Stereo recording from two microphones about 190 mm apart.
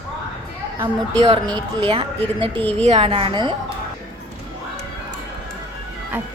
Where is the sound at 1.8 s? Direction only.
30° right (ahead or behind).